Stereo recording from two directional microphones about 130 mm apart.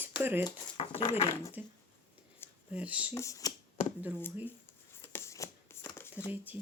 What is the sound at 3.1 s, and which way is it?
Speech, 25° left (ahead or behind).